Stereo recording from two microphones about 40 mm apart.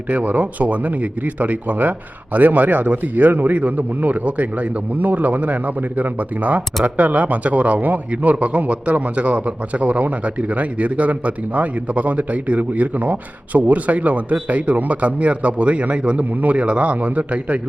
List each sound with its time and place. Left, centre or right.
0.1 s a man's voice: right